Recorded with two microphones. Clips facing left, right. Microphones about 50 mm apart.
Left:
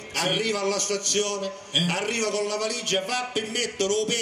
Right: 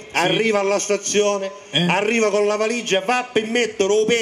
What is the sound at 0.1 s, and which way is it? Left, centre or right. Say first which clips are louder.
A man's voice: right 8 dB; right.